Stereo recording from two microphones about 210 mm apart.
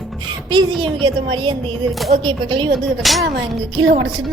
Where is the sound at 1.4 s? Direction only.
20° right (ahead or behind).